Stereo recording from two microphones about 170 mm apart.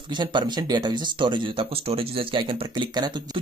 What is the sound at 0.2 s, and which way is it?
Speech, 25° right (ahead or behind).